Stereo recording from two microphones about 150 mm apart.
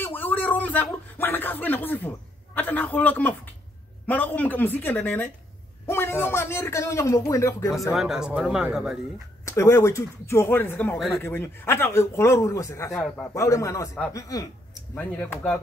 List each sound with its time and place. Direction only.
0.0 s a man's voice: 15° left (ahead or behind)
7.9 s speech: 5° right (ahead or behind)
9.4 s a man's voice: 20° left (ahead or behind)
12.9 s speech: centre (ahead or behind)
13.3 s a man's voice: 20° left (ahead or behind)
15.0 s speech: 15° left (ahead or behind)